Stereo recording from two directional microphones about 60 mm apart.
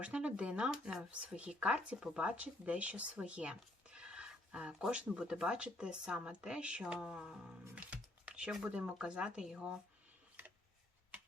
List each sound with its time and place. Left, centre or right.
0.0 s speech: centre
7.8 s computer keyboard: right
9.0 s speech: centre